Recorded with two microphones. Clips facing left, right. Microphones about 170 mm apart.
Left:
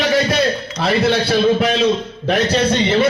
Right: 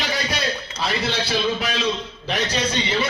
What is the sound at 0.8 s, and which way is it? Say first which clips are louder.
A man's voice: left 9 dB; 50° left (ahead or behind).